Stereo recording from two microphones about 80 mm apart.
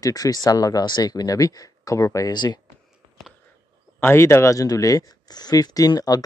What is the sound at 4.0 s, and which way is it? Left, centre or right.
Speech, left.